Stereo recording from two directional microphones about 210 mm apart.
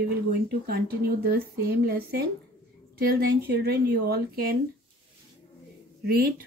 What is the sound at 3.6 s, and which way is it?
Speech, 50° right (ahead or behind).